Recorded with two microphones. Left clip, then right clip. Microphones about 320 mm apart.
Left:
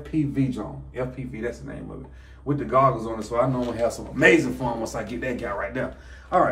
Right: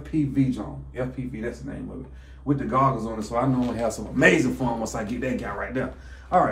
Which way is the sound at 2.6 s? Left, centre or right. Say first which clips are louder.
Left 3 dB; centre.